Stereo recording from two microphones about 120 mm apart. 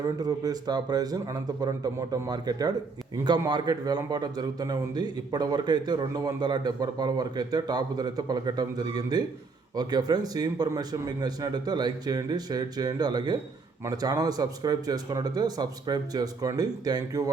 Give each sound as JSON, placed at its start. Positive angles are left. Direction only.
{"t": 0.0, "sound": "a man's voice", "side_deg": -30}